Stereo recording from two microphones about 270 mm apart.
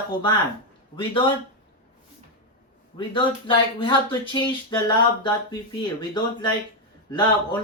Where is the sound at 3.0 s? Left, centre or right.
Centre.